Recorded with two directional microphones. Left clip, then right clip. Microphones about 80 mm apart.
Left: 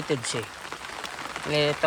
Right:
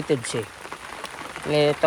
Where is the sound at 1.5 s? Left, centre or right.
Centre.